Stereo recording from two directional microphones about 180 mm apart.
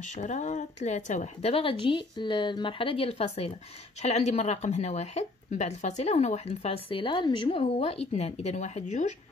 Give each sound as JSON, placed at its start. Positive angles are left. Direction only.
{"t": 0.0, "sound": "a woman's voice", "side_deg": 40}